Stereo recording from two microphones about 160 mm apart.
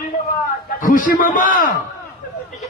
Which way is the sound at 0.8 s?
60° left (ahead or behind).